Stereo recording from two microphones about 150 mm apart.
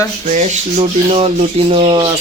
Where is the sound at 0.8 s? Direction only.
40° right (ahead or behind).